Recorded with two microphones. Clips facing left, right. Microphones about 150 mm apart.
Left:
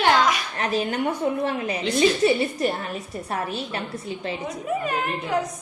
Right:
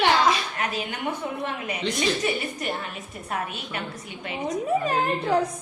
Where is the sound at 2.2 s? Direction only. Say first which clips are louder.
Left 7 dB; 30° left (ahead or behind).